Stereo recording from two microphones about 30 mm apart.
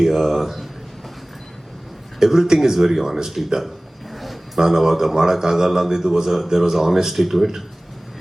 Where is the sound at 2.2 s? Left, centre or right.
Centre.